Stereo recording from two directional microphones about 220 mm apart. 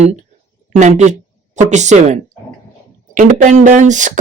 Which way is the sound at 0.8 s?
35° right (ahead or behind).